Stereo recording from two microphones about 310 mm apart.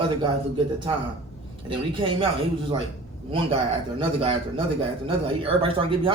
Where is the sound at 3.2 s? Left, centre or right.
Centre.